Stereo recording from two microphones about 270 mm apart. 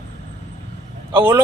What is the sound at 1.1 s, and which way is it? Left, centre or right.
Speech, centre.